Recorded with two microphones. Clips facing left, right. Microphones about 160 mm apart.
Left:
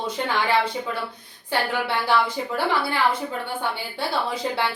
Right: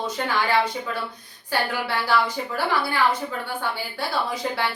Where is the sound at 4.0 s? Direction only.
25° left (ahead or behind).